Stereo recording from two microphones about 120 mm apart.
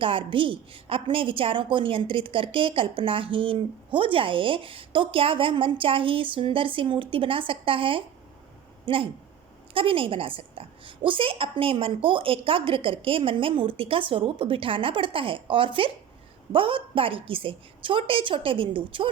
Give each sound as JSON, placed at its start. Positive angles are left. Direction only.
{"t": 0.0, "sound": "a woman's voice", "side_deg": -45}